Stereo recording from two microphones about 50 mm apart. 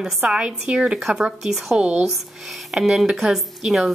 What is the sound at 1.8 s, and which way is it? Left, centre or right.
Speech, right.